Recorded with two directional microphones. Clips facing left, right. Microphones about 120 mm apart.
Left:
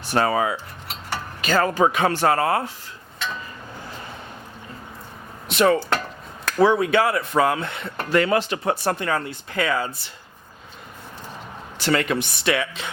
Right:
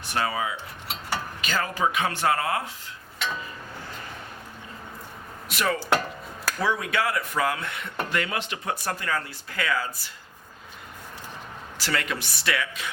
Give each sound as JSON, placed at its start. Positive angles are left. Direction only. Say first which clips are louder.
{"t": 0.0, "sound": "speech", "louder": "left 7 dB", "side_deg": 40}
{"t": 5.5, "sound": "speech", "louder": "left 6 dB", "side_deg": 25}
{"t": 11.8, "sound": "speech", "louder": "left 8 dB", "side_deg": 25}